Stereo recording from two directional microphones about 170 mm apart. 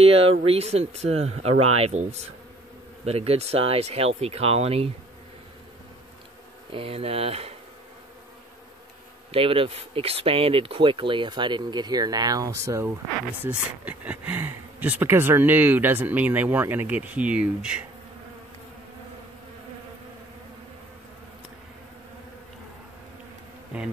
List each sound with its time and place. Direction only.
0.0 s speech: 35° right (ahead or behind)
6.7 s speech: 35° right (ahead or behind)
9.3 s speech: 30° right (ahead or behind); by 17.8 s 5° right (ahead or behind)